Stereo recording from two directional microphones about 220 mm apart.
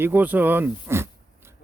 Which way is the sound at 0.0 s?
10° right (ahead or behind).